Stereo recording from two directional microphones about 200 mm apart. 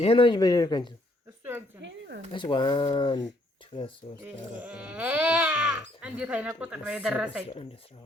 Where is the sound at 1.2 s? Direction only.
15° right (ahead or behind).